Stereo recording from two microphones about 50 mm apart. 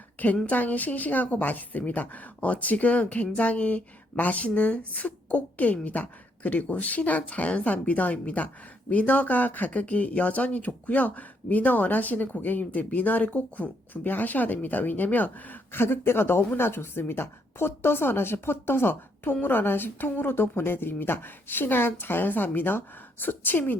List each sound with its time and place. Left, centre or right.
0.4 s speech: left
15.8 s a woman's voice: left